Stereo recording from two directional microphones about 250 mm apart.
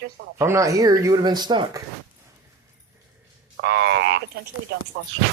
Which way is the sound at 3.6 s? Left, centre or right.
Right.